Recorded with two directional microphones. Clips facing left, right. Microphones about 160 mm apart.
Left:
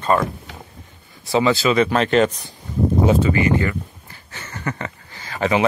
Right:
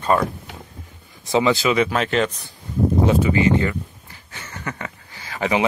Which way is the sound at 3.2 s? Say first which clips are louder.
Even; 20° right (ahead or behind).